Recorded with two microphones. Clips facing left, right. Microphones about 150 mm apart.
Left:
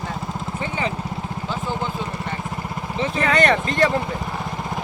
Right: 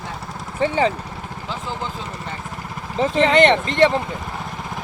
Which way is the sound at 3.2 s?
25° right (ahead or behind).